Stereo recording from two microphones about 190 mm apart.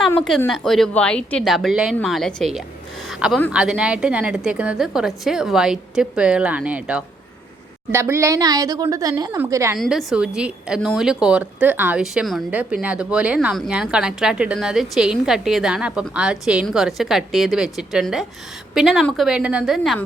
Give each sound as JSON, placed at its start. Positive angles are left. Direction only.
{"t": 0.1, "sound": "a woman's voice", "side_deg": 5}
{"t": 2.6, "sound": "a sound", "side_deg": 0}
{"t": 3.5, "sound": "a woman's voice", "side_deg": -5}
{"t": 9.7, "sound": "a woman's voice", "side_deg": 0}